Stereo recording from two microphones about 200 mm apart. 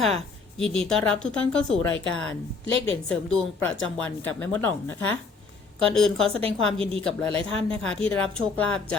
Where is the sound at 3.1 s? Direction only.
5° left (ahead or behind).